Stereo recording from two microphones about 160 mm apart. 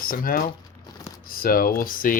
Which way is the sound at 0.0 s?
65° left (ahead or behind).